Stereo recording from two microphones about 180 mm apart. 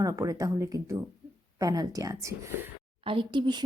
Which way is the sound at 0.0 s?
15° right (ahead or behind).